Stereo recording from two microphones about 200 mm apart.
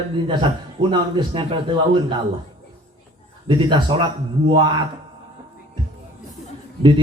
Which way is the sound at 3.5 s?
25° right (ahead or behind).